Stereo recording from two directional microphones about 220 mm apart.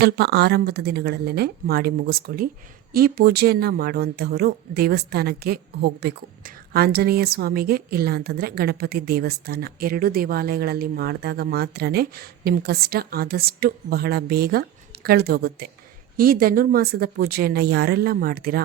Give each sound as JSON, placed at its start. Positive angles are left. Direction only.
{"t": 0.0, "sound": "speech", "side_deg": -50}